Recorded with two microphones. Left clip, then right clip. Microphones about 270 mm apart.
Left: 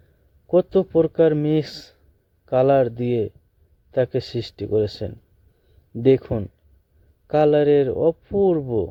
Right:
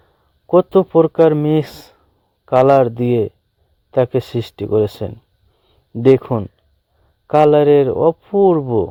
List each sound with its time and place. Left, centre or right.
0.5 s speech: centre